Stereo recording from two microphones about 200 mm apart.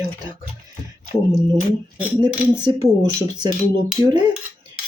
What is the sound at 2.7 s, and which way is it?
Speech, 20° right (ahead or behind).